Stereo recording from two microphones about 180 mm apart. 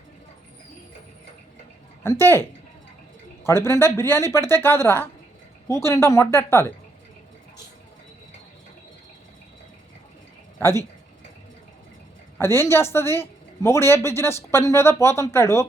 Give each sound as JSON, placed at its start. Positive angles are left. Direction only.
{"t": 2.0, "sound": "a man's voice", "side_deg": 15}
{"t": 10.6, "sound": "speech", "side_deg": 15}
{"t": 12.4, "sound": "a man's voice", "side_deg": 15}